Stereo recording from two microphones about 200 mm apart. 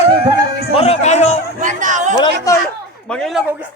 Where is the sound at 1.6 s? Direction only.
40° right (ahead or behind).